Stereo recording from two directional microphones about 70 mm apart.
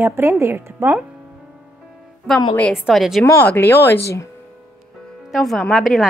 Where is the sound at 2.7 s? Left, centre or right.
Centre.